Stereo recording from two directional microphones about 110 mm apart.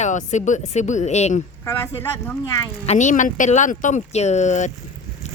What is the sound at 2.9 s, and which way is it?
Speech, 75° left (ahead or behind).